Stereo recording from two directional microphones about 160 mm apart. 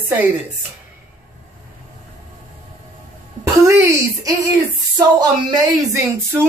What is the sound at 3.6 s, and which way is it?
Speech, 20° right (ahead or behind).